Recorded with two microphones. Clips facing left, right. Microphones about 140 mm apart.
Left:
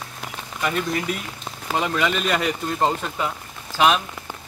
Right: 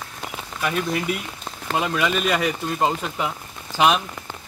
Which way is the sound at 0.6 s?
5° right (ahead or behind).